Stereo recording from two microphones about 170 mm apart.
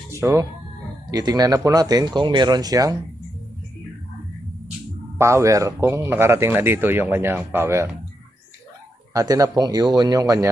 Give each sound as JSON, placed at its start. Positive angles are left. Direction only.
{"t": 0.1, "sound": "speech", "side_deg": -20}
{"t": 5.1, "sound": "speech", "side_deg": -15}
{"t": 9.1, "sound": "speech", "side_deg": -20}